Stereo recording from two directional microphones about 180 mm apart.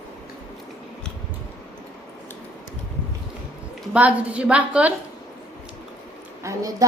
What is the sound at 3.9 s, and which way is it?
A woman's voice, 5° right (ahead or behind).